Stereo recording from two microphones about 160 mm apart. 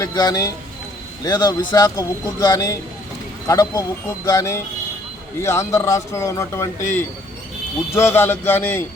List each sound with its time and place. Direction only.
0.0 s speech: 25° left (ahead or behind)